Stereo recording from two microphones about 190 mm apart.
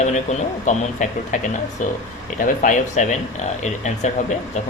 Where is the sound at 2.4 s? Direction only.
40° left (ahead or behind).